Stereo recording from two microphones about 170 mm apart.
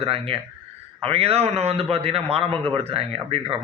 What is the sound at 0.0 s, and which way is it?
A man's voice, 35° right (ahead or behind).